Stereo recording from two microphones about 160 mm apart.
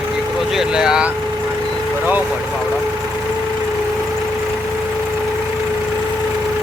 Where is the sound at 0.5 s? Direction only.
5° right (ahead or behind).